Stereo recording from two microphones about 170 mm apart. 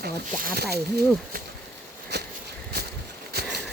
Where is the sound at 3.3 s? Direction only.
70° right (ahead or behind).